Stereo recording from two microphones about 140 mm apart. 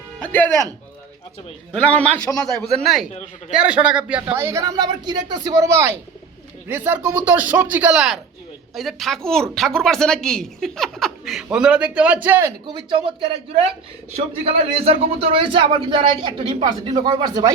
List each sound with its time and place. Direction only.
0.2 s speech: 10° left (ahead or behind)
1.7 s a man's voice: 10° left (ahead or behind); by 12.5 s 15° right (ahead or behind)
12.6 s speech: 35° right (ahead or behind)
14.4 s a man's voice: 45° right (ahead or behind)